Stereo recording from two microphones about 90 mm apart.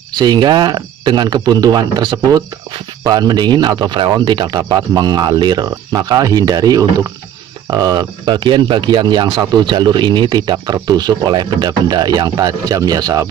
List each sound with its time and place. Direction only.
0.1 s speech: 50° right (ahead or behind)